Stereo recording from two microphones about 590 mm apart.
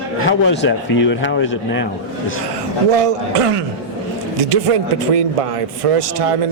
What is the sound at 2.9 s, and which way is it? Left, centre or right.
Speech, right.